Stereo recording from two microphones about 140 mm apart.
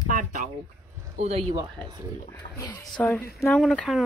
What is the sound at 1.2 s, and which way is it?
Speech, 45° right (ahead or behind).